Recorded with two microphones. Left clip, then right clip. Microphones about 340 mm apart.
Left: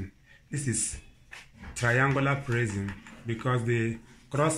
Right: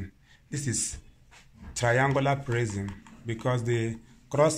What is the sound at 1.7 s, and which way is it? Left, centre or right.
Speech, right.